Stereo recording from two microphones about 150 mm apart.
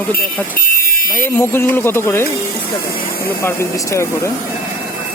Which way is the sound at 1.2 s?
15° left (ahead or behind).